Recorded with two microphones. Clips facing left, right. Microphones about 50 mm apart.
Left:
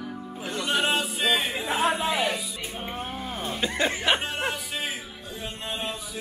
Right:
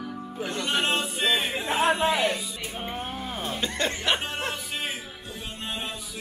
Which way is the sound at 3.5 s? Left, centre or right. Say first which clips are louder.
Left 4 dB; centre.